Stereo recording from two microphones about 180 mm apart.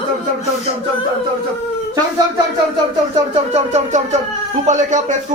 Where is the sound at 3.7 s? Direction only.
40° right (ahead or behind).